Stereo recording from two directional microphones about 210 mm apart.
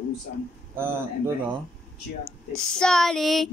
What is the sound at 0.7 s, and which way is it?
Speech, 10° right (ahead or behind).